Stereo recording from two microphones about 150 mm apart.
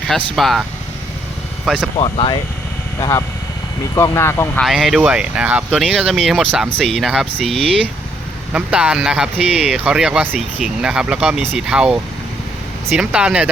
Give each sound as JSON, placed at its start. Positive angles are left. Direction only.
{"t": 0.3, "sound": "speech", "side_deg": 0}
{"t": 1.6, "sound": "speech", "side_deg": -5}
{"t": 2.0, "sound": "speech", "side_deg": 35}
{"t": 3.0, "sound": "speech", "side_deg": 25}
{"t": 4.6, "sound": "speech", "side_deg": 0}
{"t": 8.5, "sound": "speech", "side_deg": -10}